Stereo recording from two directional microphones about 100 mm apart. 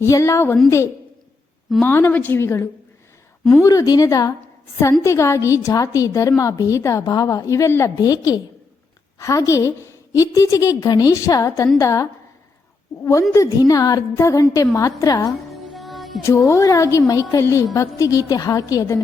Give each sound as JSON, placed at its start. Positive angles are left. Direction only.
{"t": 0.0, "sound": "a woman's voice", "side_deg": 30}
{"t": 1.8, "sound": "a woman's voice", "side_deg": 20}
{"t": 3.6, "sound": "a woman's voice", "side_deg": 35}
{"t": 13.3, "sound": "a woman's voice", "side_deg": 35}
{"t": 15.5, "sound": "music", "side_deg": 0}
{"t": 16.5, "sound": "a woman's voice", "side_deg": 35}